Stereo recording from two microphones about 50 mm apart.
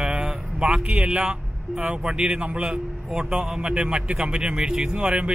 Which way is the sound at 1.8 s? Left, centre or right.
Right.